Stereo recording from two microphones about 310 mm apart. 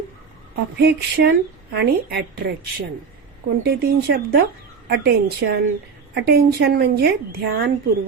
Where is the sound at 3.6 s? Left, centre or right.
Right.